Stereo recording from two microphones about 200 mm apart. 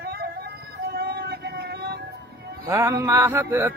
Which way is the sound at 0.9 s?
55° right (ahead or behind).